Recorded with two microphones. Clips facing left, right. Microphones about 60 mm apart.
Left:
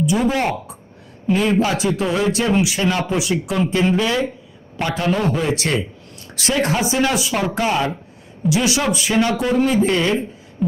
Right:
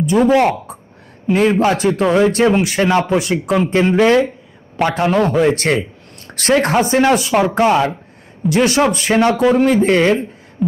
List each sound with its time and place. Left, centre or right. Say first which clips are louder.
0.0 s speech: right 6 dB; right
1.5 s a man's voice: right 4 dB; right